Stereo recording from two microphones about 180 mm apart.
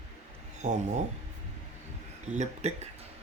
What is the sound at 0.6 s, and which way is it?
Speech, 45° right (ahead or behind).